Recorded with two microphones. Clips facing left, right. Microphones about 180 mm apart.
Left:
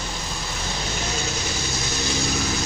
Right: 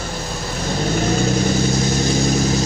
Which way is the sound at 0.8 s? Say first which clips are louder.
Right 13 dB; 45° right (ahead or behind).